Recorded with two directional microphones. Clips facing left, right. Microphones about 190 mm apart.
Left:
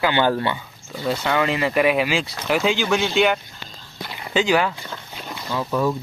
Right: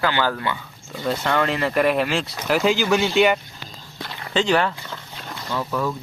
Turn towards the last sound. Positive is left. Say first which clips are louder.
# left 2 dB
turn(degrees=10)  # may be behind; listen again after turning